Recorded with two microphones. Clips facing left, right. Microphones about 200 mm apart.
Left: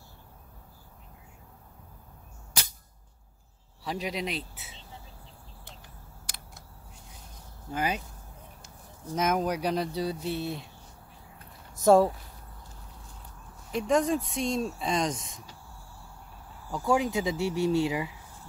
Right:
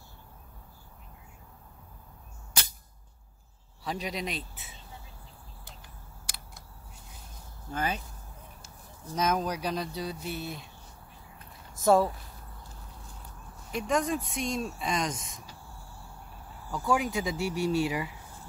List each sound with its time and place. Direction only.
3.8 s speech: 10° left (ahead or behind)
7.7 s speech: 10° left (ahead or behind)
11.8 s speech: 40° left (ahead or behind)
13.7 s speech: 30° left (ahead or behind)
16.7 s speech: 25° left (ahead or behind)